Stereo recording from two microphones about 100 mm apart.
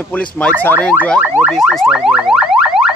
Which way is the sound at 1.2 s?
20° right (ahead or behind).